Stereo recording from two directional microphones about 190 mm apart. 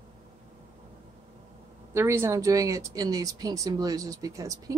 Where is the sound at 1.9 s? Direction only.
15° right (ahead or behind).